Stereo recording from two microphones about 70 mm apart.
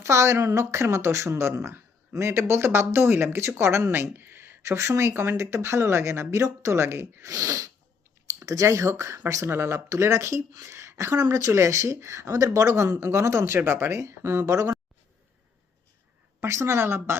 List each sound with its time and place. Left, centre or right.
0.0 s speech: right
16.4 s speech: right